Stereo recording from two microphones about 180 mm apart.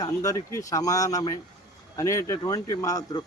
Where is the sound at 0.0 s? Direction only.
20° left (ahead or behind).